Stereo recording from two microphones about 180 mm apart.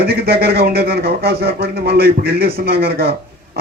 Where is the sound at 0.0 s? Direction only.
60° right (ahead or behind).